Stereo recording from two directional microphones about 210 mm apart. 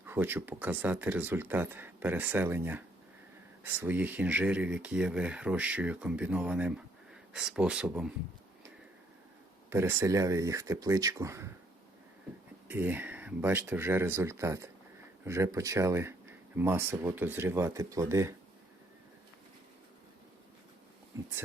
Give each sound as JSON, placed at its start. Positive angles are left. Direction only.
{"t": 0.0, "sound": "speech", "side_deg": -10}
{"t": 9.6, "sound": "speech", "side_deg": -10}
{"t": 12.6, "sound": "speech", "side_deg": -10}